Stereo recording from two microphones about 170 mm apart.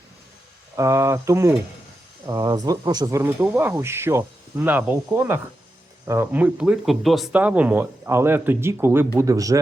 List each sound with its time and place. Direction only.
0.8 s speech: 15° right (ahead or behind)